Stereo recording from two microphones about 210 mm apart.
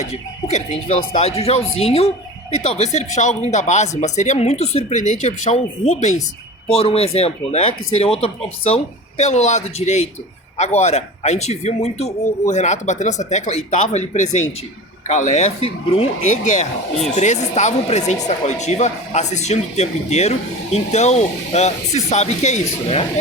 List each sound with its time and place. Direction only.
0.5 s speech: 30° left (ahead or behind)